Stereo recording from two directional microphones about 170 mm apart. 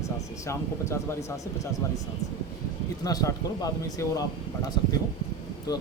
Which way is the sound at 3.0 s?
20° left (ahead or behind).